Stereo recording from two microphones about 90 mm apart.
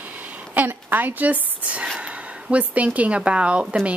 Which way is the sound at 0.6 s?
20° right (ahead or behind).